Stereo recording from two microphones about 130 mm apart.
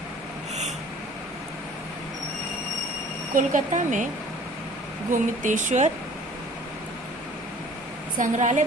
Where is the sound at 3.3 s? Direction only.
75° right (ahead or behind).